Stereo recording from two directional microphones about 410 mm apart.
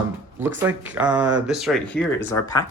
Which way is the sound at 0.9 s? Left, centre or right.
Centre.